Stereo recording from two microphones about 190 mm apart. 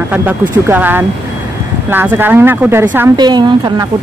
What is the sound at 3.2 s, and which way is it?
Speech, 20° right (ahead or behind).